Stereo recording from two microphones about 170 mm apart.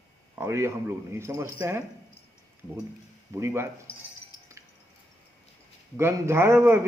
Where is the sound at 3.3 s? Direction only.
15° right (ahead or behind).